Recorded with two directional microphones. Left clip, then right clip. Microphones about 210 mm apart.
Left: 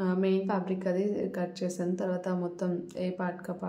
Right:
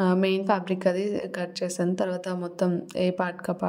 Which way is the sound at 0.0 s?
40° right (ahead or behind).